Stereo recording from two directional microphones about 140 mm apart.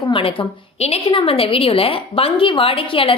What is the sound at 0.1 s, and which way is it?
A woman's voice, 40° left (ahead or behind).